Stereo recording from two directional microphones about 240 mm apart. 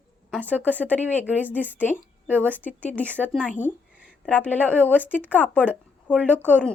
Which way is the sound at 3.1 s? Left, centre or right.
Centre.